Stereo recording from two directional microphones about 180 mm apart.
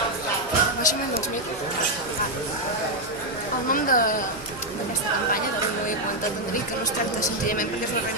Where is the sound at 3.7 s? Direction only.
50° left (ahead or behind).